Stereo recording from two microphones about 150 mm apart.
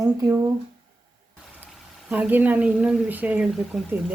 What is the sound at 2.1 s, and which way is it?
Speech, 10° right (ahead or behind).